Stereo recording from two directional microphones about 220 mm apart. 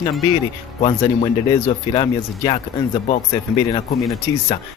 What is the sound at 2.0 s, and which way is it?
Speech, 25° left (ahead or behind).